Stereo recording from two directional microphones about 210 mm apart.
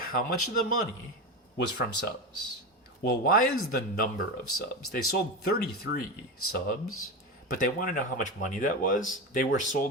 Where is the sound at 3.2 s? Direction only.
45° left (ahead or behind).